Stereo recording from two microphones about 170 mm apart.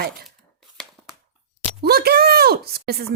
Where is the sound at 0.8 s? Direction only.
5° left (ahead or behind).